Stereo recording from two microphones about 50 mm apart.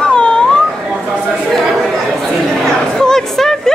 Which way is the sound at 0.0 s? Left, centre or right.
Centre.